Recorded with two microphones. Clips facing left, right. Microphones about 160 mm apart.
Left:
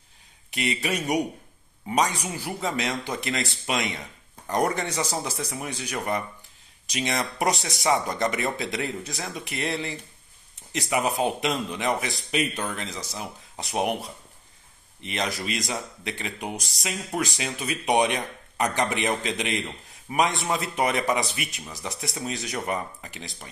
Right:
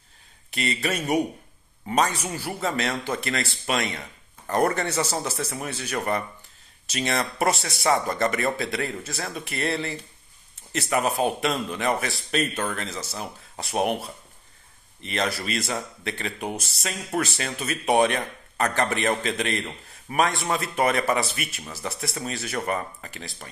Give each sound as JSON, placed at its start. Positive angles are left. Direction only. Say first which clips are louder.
{"t": 0.5, "sound": "speech", "louder": "even", "side_deg": 15}